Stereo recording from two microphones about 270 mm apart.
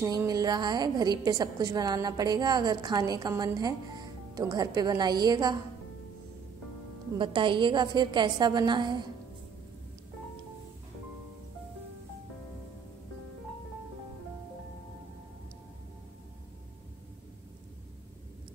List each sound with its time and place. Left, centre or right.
0.0 s a woman's voice: centre
7.2 s a woman's voice: centre